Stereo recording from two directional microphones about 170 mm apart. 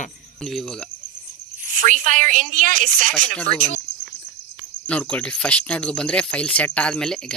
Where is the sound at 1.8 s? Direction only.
50° right (ahead or behind).